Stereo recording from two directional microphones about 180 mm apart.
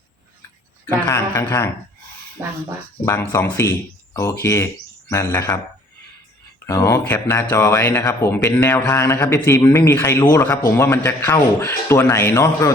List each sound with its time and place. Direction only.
0.9 s speech: 15° left (ahead or behind)
2.4 s speech: 15° right (ahead or behind)
3.1 s speech: 15° left (ahead or behind)
6.7 s speech: 15° left (ahead or behind)